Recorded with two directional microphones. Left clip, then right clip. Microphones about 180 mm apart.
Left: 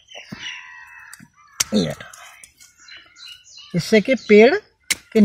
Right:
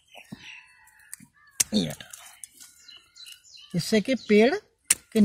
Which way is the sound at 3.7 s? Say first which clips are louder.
Left 8 dB; 25° left (ahead or behind).